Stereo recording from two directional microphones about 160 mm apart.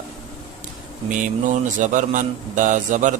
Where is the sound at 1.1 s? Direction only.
55° right (ahead or behind).